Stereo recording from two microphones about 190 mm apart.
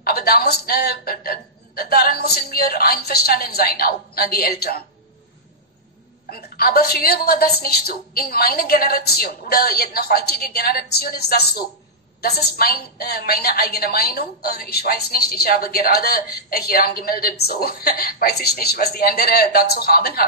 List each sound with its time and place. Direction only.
0.0 s a woman's voice: 50° left (ahead or behind)
6.3 s a woman's voice: 50° left (ahead or behind)